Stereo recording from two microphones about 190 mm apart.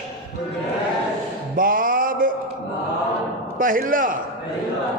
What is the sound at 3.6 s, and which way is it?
Speech, 45° right (ahead or behind).